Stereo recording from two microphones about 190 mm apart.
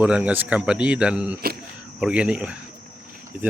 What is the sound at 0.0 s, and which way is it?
Speech, 5° right (ahead or behind).